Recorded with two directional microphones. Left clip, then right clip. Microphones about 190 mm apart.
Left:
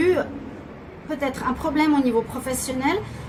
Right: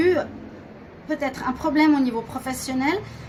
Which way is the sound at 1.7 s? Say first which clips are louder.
Right 3 dB; 50° right (ahead or behind).